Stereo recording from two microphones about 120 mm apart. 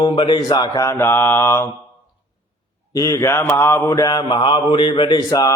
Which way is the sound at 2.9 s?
30° left (ahead or behind).